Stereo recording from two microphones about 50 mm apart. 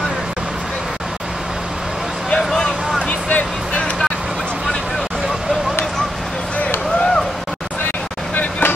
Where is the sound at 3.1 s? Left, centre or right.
Left.